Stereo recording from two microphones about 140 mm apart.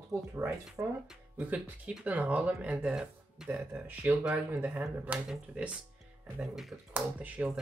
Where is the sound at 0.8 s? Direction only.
20° right (ahead or behind).